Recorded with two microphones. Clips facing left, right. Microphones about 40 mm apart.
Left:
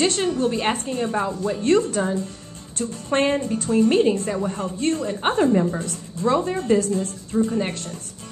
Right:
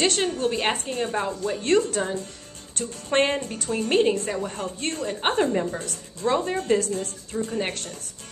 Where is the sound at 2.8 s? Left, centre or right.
Centre.